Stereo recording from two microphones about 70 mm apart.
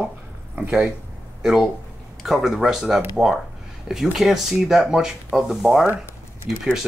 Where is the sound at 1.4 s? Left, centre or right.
Centre.